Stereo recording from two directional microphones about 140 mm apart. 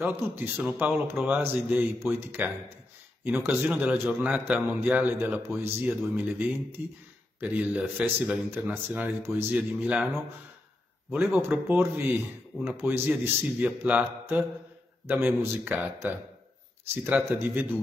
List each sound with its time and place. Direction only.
0.0 s speech: 10° right (ahead or behind)
5.9 s speech: 5° right (ahead or behind)
11.3 s speech: 15° right (ahead or behind)